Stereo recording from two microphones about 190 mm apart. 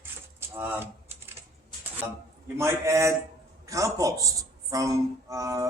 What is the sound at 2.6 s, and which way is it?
A man's voice, 15° right (ahead or behind).